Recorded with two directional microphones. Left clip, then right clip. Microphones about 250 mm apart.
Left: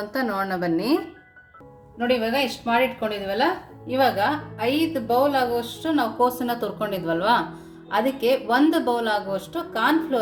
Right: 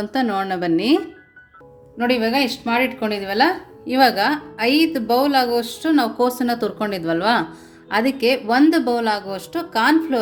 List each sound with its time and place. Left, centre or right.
0.1 s a woman's voice: right
2.0 s a woman's voice: right